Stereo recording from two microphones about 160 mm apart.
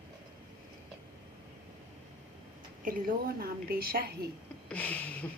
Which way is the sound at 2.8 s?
65° right (ahead or behind).